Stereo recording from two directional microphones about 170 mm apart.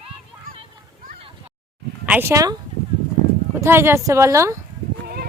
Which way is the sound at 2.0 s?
10° right (ahead or behind).